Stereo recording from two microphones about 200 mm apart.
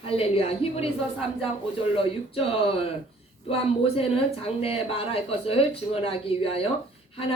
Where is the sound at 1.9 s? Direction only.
30° left (ahead or behind).